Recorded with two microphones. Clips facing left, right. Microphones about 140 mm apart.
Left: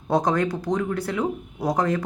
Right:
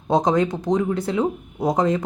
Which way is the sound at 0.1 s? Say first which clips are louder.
Right 3 dB; 20° right (ahead or behind).